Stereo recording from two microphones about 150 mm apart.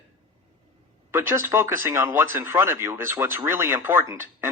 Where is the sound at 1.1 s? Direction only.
15° right (ahead or behind).